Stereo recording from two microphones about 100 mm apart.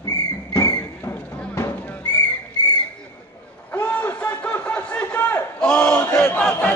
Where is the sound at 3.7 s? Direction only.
20° left (ahead or behind).